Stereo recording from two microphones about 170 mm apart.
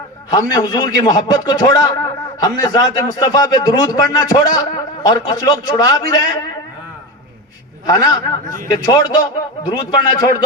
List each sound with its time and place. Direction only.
0.3 s a man's voice: 25° left (ahead or behind)
7.9 s a man's voice: 20° left (ahead or behind)